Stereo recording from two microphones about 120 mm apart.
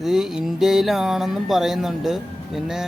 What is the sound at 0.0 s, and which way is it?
Music, 5° right (ahead or behind).